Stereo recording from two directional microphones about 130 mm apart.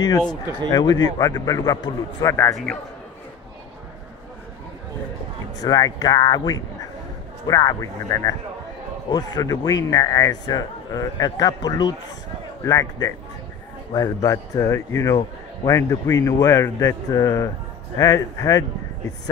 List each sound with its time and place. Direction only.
0.7 s speech: 30° left (ahead or behind)
2.5 s a man's voice: 5° left (ahead or behind)
5.6 s speech: 30° left (ahead or behind)